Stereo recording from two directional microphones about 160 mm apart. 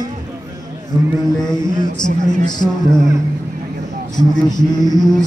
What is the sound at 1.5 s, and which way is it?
A woman's voice, 25° left (ahead or behind).